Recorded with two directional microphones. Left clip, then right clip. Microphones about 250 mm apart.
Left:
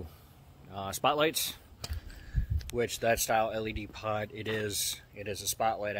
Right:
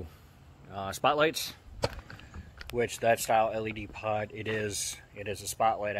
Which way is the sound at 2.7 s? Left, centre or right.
Centre.